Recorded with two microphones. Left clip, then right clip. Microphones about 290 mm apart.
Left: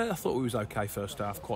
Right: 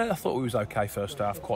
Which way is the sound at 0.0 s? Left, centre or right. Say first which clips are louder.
Right 3 dB; centre.